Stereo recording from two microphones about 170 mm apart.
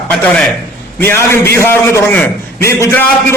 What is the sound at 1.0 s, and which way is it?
A man's voice, 15° left (ahead or behind).